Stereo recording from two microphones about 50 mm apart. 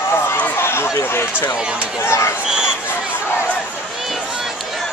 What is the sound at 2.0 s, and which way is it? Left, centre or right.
Speech, left.